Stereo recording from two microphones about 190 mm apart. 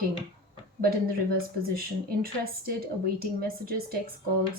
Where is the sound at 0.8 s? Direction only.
50° right (ahead or behind).